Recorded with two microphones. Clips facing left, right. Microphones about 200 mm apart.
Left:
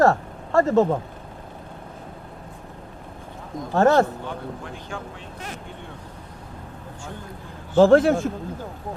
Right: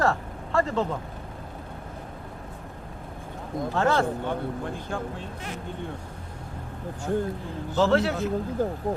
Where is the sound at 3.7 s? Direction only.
45° left (ahead or behind).